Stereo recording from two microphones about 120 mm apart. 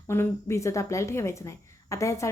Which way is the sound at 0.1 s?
20° left (ahead or behind).